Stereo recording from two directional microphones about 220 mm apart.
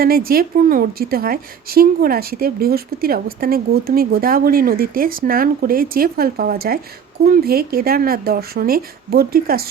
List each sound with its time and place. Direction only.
0.0 s a woman's voice: 40° right (ahead or behind)